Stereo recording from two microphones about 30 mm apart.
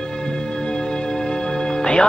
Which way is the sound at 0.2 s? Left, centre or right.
Left.